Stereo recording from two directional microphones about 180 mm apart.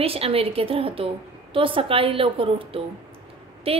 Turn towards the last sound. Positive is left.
turn(degrees=-30)  # may be behind; listen again after turning